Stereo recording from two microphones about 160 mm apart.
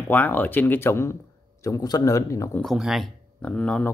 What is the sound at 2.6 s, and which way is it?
Speech, centre (ahead or behind).